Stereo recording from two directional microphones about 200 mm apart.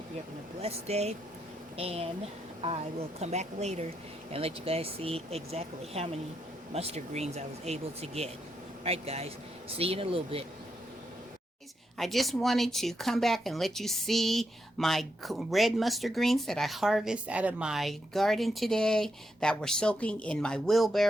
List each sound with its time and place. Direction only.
0.6 s speech: 30° right (ahead or behind)
11.9 s speech: centre (ahead or behind)